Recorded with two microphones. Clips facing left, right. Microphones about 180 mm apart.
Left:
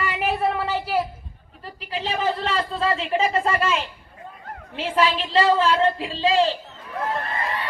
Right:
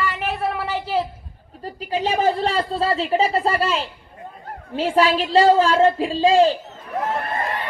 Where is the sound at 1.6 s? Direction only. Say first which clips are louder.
Right 6 dB; 45° right (ahead or behind).